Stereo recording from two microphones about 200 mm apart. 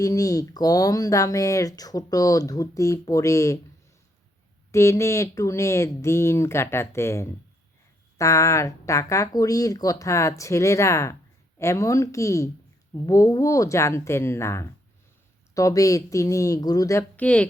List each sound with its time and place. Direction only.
0.0 s speech: 15° left (ahead or behind)
4.7 s speech: 15° left (ahead or behind)